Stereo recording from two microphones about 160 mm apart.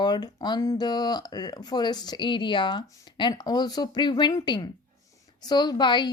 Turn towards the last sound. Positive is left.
turn(degrees=30)  # may be behind; listen again after turning